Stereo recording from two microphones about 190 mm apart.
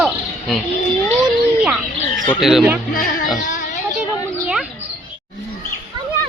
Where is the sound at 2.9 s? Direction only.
50° left (ahead or behind).